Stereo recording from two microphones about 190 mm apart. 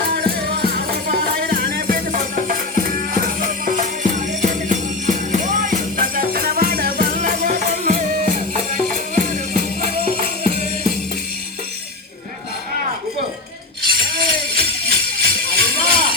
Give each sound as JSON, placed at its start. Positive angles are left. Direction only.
{"t": 0.1, "sound": "music", "side_deg": -55}
{"t": 10.4, "sound": "music", "side_deg": -30}
{"t": 13.8, "sound": "music", "side_deg": -55}